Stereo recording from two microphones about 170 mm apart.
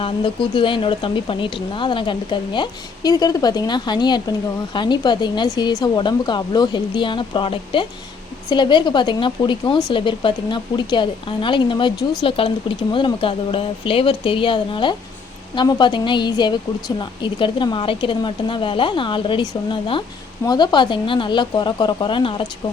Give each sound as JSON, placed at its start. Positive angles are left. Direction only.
{"t": 0.0, "sound": "speech", "side_deg": 30}